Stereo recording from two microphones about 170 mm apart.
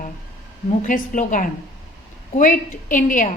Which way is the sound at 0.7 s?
45° left (ahead or behind).